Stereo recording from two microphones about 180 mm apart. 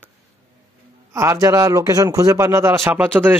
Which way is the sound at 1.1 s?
15° right (ahead or behind).